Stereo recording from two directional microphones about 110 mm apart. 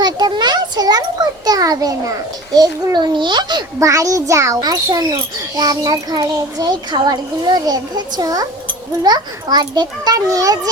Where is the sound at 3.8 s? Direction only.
30° right (ahead or behind).